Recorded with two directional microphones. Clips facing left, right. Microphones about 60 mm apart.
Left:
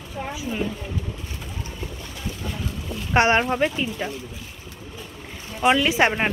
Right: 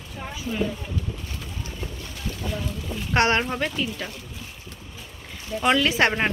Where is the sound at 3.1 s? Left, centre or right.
Centre.